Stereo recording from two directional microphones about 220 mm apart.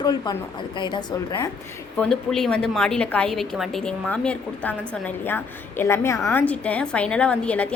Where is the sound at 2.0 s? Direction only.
Centre (ahead or behind).